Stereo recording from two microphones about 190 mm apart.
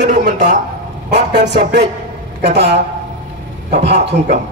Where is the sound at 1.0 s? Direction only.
60° right (ahead or behind).